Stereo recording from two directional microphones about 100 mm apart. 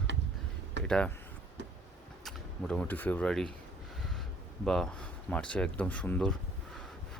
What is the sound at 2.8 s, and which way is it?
Speech, 20° left (ahead or behind).